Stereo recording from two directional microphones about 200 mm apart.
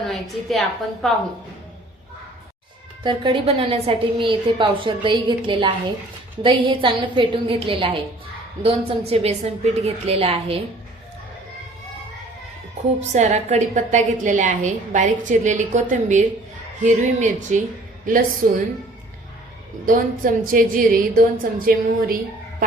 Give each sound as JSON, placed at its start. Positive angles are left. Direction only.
{"t": 0.0, "sound": "a woman's voice", "side_deg": 0}
{"t": 3.0, "sound": "a woman's voice", "side_deg": -25}
{"t": 13.0, "sound": "a woman's voice", "side_deg": -35}
{"t": 19.8, "sound": "a woman's voice", "side_deg": -45}